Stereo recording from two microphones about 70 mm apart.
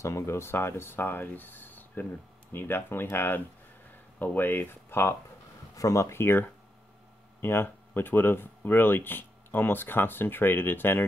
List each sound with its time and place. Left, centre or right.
0.0 s speech: left
5.8 s speech: left